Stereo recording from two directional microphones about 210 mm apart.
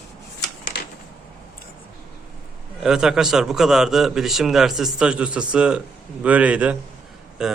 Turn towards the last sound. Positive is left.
turn(degrees=0)  # may be behind; listen again after turning